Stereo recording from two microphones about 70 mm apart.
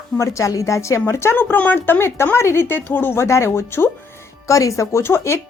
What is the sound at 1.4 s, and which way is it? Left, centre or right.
Speech, left.